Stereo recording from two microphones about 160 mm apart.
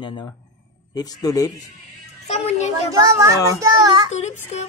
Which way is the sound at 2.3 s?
45° left (ahead or behind).